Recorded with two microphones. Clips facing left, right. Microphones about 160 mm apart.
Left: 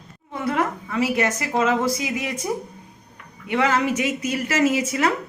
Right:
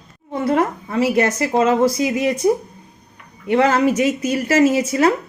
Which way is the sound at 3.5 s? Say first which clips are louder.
Right 6 dB; 35° right (ahead or behind).